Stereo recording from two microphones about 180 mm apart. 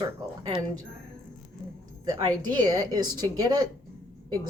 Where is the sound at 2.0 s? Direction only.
20° right (ahead or behind).